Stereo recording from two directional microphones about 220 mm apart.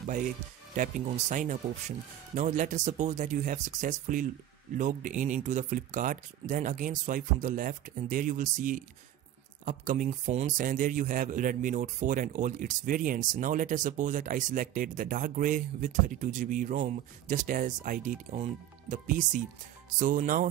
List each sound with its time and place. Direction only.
0.0 s a man's voice: 35° right (ahead or behind)